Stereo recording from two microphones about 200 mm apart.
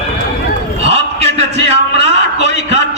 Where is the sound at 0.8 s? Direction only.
30° right (ahead or behind).